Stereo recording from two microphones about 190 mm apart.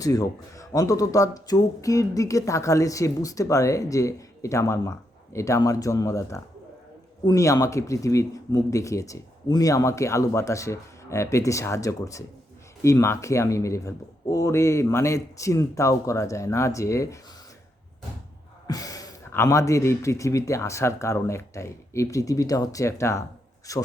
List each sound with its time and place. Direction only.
0.0 s speech: 20° left (ahead or behind)
18.7 s speech: 20° left (ahead or behind)